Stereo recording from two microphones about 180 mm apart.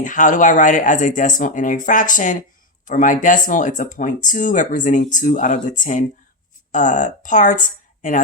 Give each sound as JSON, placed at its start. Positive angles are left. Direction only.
{"t": 0.0, "sound": "speech", "side_deg": 45}